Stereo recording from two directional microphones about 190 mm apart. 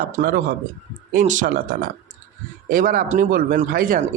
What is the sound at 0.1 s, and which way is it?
A man's voice, 50° right (ahead or behind).